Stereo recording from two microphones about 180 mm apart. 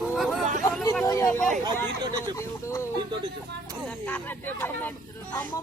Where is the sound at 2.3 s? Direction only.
15° left (ahead or behind).